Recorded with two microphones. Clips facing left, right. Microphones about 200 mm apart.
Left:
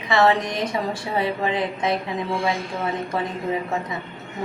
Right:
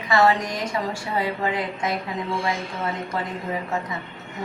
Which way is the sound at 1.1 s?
25° left (ahead or behind).